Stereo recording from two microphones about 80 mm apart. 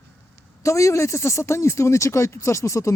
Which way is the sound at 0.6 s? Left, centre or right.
Left.